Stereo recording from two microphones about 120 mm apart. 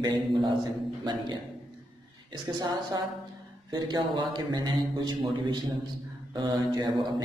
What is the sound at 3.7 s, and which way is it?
A man's voice, 35° right (ahead or behind).